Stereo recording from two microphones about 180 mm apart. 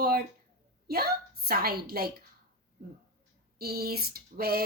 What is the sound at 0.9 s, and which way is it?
A woman's voice, 60° right (ahead or behind).